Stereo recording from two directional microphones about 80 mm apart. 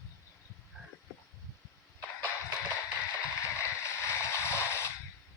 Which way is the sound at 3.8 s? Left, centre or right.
Left.